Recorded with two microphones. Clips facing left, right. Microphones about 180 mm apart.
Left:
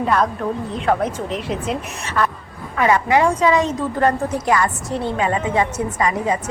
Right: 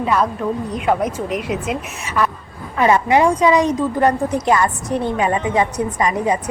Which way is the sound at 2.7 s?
25° right (ahead or behind).